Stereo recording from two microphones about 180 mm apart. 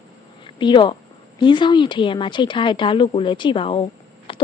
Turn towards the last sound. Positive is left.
turn(degrees=30)  # may be behind; listen again after turning